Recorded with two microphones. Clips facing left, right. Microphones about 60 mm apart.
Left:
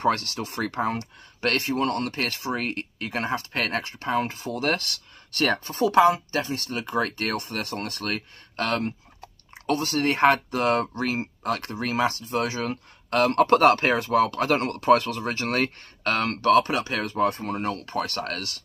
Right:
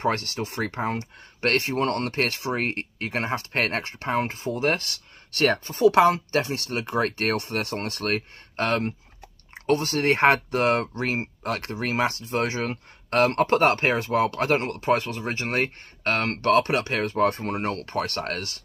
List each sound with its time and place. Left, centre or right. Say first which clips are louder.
0.0 s speech: left 1 dB; right
0.7 s speech: left 3 dB; right
1.4 s speech: right 1 dB; right
5.3 s speech: right 2 dB; right
14.6 s speech: left 4 dB; right